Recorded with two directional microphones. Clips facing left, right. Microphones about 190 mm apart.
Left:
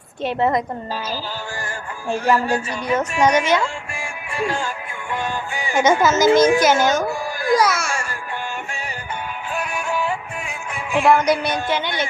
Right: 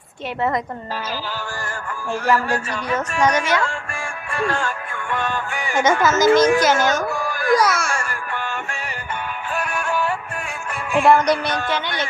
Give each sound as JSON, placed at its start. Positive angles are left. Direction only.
{"t": 0.3, "sound": "a woman's voice", "side_deg": 25}
{"t": 2.0, "sound": "a man's voice", "side_deg": 20}
{"t": 7.5, "sound": "speech", "side_deg": 0}
{"t": 9.6, "sound": "music", "side_deg": 0}
{"t": 11.5, "sound": "a man's voice", "side_deg": 15}